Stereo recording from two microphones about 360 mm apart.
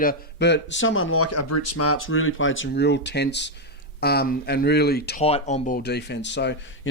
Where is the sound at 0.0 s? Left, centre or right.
Left.